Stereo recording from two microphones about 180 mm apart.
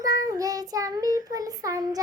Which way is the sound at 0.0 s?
20° right (ahead or behind).